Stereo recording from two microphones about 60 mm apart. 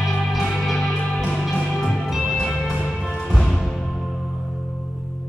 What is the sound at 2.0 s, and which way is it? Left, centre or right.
Music, centre.